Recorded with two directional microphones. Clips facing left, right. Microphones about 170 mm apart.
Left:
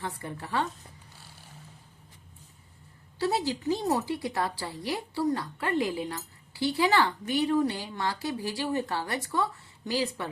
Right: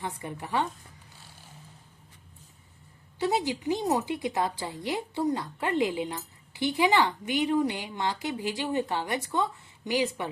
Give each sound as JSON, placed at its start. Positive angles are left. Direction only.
{"t": 0.0, "sound": "a woman's voice", "side_deg": -15}
{"t": 3.2, "sound": "a woman's voice", "side_deg": -20}